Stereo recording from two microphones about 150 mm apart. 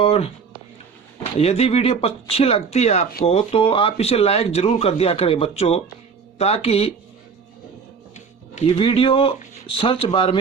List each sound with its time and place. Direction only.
0.0 s speech: 40° left (ahead or behind)
1.4 s speech: 45° left (ahead or behind)
8.6 s speech: 35° left (ahead or behind)